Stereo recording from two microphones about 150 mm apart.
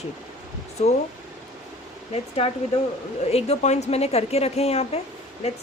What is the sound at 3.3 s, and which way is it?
A woman's voice, 45° left (ahead or behind).